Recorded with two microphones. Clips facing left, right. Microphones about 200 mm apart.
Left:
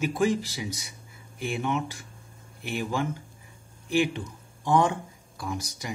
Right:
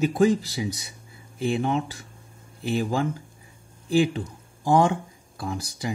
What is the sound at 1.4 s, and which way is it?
Speech, 35° right (ahead or behind).